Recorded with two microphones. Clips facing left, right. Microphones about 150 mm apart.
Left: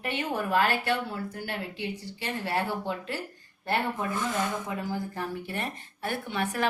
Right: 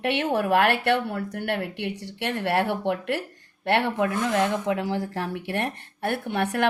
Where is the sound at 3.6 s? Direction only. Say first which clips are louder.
Right 6 dB; 80° right.